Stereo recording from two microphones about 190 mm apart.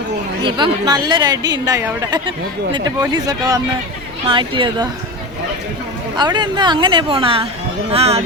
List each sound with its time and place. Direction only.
0.4 s speech: 25° right (ahead or behind)
6.1 s speech: 20° right (ahead or behind)